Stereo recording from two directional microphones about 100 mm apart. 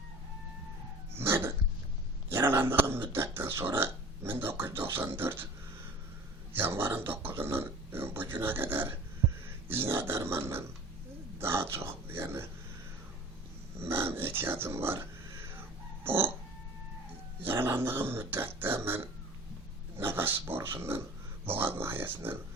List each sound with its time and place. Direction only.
1.1 s dog: 25° right (ahead or behind)
2.3 s speech: 20° right (ahead or behind)
6.5 s speech: 20° right (ahead or behind)
13.7 s speech: 25° right (ahead or behind)
17.4 s speech: 25° right (ahead or behind)